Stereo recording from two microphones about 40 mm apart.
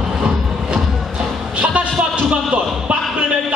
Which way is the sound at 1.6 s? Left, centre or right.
Right.